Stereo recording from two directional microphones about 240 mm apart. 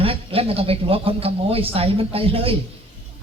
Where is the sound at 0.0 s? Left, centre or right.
Right.